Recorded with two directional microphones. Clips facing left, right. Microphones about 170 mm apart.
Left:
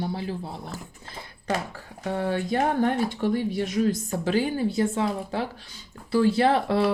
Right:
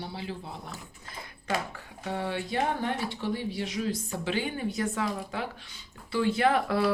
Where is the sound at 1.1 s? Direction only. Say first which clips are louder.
Left 3 dB; 35° left (ahead or behind).